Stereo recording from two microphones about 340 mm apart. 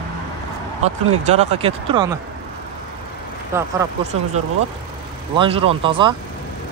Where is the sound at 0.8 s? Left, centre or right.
Right.